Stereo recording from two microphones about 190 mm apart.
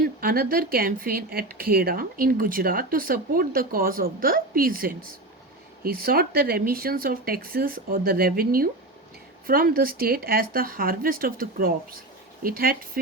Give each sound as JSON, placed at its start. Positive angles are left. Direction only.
{"t": 0.2, "sound": "speech", "side_deg": -50}